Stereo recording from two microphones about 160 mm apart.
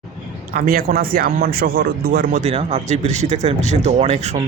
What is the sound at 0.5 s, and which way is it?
Speech, 65° right (ahead or behind).